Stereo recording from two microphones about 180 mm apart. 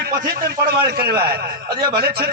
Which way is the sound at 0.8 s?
60° right (ahead or behind).